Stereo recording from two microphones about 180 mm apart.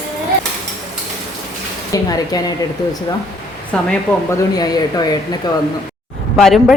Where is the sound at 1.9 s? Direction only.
20° left (ahead or behind).